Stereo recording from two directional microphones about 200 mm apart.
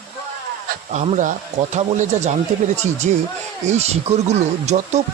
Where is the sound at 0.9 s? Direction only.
35° right (ahead or behind).